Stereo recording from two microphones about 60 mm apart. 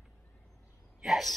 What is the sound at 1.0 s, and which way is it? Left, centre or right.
Speech, centre.